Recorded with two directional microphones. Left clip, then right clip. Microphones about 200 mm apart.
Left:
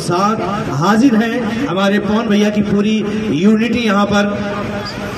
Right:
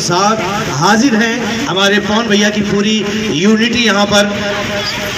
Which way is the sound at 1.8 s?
65° left (ahead or behind).